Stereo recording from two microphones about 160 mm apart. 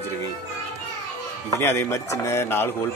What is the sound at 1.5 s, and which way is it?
Speech, 15° left (ahead or behind).